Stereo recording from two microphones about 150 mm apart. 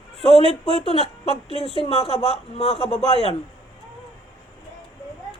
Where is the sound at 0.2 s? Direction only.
40° left (ahead or behind).